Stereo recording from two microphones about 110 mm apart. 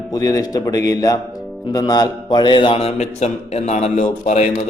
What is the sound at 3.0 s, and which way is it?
A man's voice, 85° left.